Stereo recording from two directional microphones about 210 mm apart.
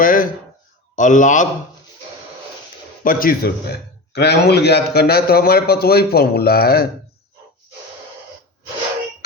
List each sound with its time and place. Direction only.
0.0 s a man's voice: 40° left (ahead or behind)
3.0 s speech: 40° left (ahead or behind)